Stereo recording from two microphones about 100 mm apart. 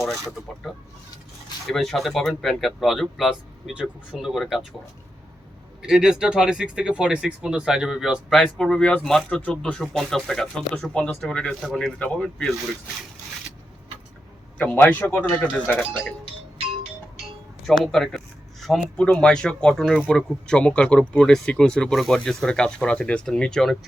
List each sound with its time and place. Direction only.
0.7 s speech: 5° right (ahead or behind)
5.8 s speech: 5° right (ahead or behind)
8.3 s speech: 5° left (ahead or behind)
14.6 s speech: 15° left (ahead or behind)
17.7 s speech: 5° left (ahead or behind)